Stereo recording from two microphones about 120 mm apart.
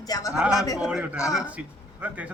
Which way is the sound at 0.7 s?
5° right (ahead or behind).